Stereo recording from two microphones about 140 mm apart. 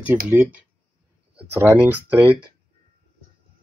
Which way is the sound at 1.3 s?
15° right (ahead or behind).